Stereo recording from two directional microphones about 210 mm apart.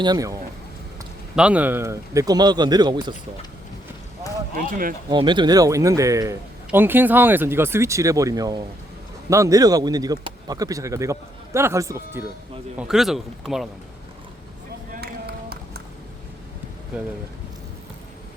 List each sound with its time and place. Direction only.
0.0 s a man's voice: 15° right (ahead or behind)
1.4 s speech: 5° right (ahead or behind)
4.5 s speech: 40° right (ahead or behind)
5.0 s a man's voice: 20° right (ahead or behind)
12.7 s a man's voice: centre (ahead or behind)
15.0 s run: 50° right (ahead or behind)